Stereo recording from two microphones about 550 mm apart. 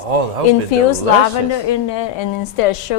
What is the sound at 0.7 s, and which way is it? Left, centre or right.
Speech, left.